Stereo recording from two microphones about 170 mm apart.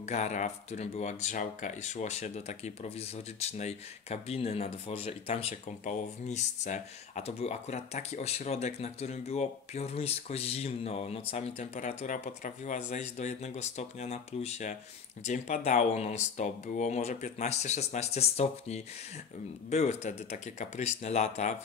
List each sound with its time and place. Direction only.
0.0 s speech: 40° left (ahead or behind)